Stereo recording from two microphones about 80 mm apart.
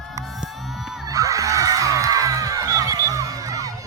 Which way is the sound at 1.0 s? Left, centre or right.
Right.